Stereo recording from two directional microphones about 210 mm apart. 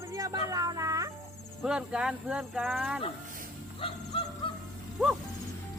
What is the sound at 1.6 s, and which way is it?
Speech, 5° right (ahead or behind).